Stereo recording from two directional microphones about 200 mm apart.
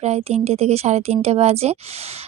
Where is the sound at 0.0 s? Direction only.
30° right (ahead or behind).